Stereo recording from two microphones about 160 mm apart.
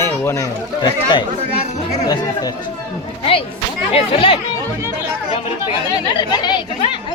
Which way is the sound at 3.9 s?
35° left (ahead or behind).